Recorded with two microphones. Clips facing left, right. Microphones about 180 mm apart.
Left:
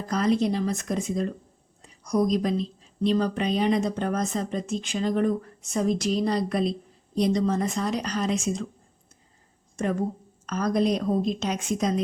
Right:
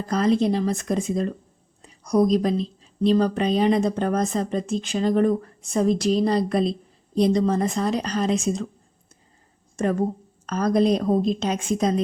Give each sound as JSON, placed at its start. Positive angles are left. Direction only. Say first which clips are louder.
{"t": 0.1, "sound": "speech", "louder": "right 3 dB", "side_deg": -30}
{"t": 10.4, "sound": "speech", "louder": "right 4 dB", "side_deg": -30}